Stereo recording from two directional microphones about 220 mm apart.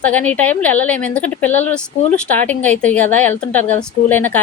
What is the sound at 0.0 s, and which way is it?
Speech, 5° left (ahead or behind).